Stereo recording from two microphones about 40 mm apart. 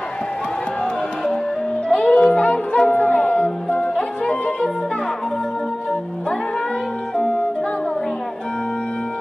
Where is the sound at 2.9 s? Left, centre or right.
Left.